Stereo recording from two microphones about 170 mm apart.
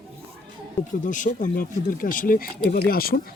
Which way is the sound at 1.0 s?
50° left (ahead or behind).